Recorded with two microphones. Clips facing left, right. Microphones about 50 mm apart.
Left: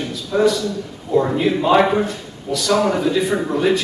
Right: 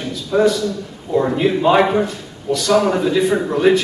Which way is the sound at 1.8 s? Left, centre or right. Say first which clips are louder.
Right 1 dB; centre.